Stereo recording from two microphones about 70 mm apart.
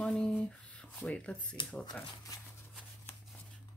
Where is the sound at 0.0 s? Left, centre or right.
Centre.